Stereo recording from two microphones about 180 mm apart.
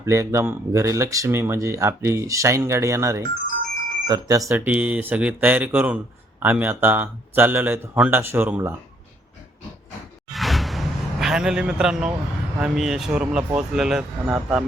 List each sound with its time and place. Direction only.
0.0 s speech: 15° right (ahead or behind)
10.3 s a sound: centre (ahead or behind)
12.5 s speech: 5° right (ahead or behind)